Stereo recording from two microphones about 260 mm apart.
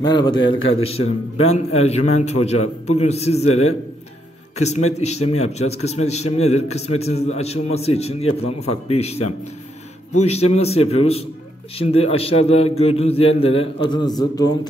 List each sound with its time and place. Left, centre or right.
0.0 s a man's voice: centre
4.6 s a man's voice: left